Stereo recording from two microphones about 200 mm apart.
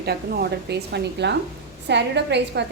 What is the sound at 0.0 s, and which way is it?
A woman's voice, 50° right (ahead or behind).